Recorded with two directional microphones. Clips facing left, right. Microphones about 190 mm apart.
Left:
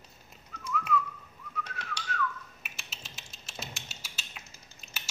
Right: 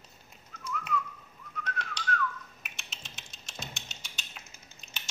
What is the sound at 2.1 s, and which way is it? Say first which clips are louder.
Finger snapping: right 3 dB; 5° left (ahead or behind).